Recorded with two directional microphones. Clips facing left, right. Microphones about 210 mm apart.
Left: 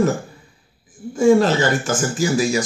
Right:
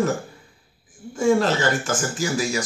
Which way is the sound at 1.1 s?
25° left (ahead or behind).